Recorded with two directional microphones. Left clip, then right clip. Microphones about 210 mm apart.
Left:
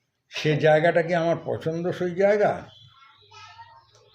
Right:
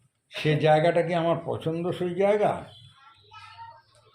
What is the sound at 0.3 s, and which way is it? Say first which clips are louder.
Speech: left 2 dB; 15° left (ahead or behind).